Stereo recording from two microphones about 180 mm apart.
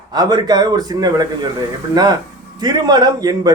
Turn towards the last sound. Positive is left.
turn(degrees=-20)  # may be behind; listen again after turning